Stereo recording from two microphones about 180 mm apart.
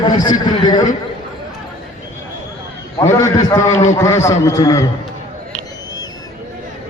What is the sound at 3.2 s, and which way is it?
A man's voice, 20° left (ahead or behind).